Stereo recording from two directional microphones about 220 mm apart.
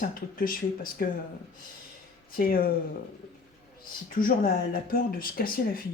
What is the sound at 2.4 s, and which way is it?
Speech, 40° left (ahead or behind).